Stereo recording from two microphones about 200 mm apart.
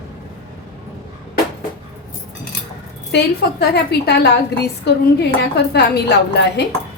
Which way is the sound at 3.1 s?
55° left (ahead or behind).